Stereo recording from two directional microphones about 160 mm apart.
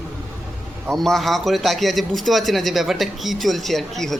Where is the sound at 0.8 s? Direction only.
Centre (ahead or behind).